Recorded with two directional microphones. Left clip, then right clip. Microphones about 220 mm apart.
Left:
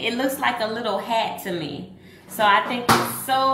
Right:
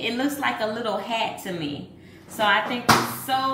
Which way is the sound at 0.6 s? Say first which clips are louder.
Left 2 dB; 30° left (ahead or behind).